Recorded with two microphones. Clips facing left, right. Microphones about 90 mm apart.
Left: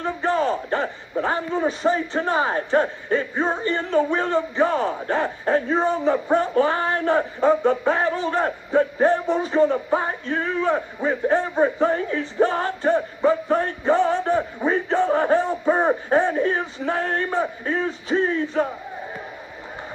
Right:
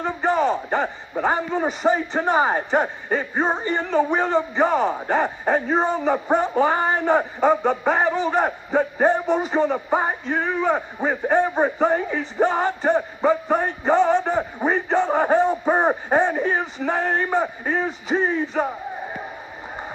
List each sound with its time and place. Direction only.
0.0 s a man's voice: 15° right (ahead or behind)
3.3 s speech: 25° right (ahead or behind)
3.6 s a man's voice: 15° right (ahead or behind)